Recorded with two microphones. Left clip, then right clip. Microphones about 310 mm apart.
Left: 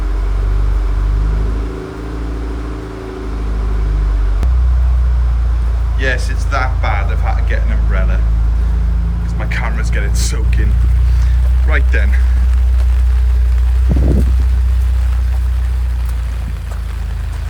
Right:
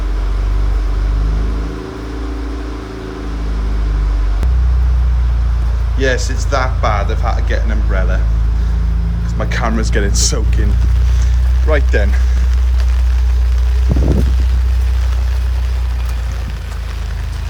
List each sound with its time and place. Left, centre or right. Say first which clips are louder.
6.0 s speech: right 2 dB; centre
9.4 s speech: right 4 dB; centre
11.7 s speech: right 3 dB; centre
13.9 s boat: right 1 dB; left